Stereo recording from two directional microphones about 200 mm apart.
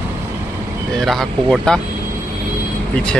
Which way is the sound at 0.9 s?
Centre (ahead or behind).